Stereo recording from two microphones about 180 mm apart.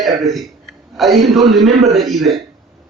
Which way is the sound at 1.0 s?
Centre (ahead or behind).